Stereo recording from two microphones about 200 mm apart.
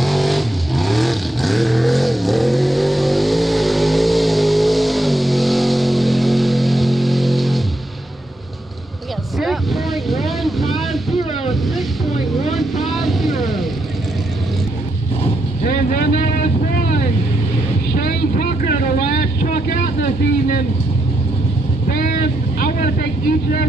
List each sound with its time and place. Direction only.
0.0 s vehicle: centre (ahead or behind)
9.4 s vehicle: centre (ahead or behind)
15.6 s vehicle: 45° left (ahead or behind)
17.9 s vehicle: 45° left (ahead or behind)